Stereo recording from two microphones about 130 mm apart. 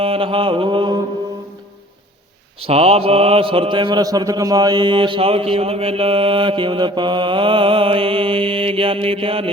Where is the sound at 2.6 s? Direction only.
50° right (ahead or behind).